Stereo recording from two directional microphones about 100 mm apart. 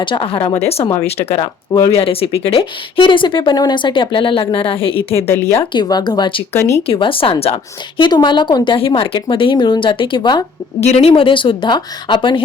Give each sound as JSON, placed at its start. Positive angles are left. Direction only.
{"t": 0.0, "sound": "speech", "side_deg": 60}
{"t": 1.9, "sound": "speech", "side_deg": 75}
{"t": 5.1, "sound": "speech", "side_deg": 25}
{"t": 5.7, "sound": "speech", "side_deg": 45}
{"t": 6.5, "sound": "speech", "side_deg": 30}
{"t": 6.8, "sound": "speech", "side_deg": 65}
{"t": 10.8, "sound": "speech", "side_deg": 90}